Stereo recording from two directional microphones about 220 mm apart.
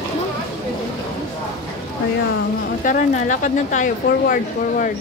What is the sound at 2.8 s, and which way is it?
Speech, 35° left (ahead or behind).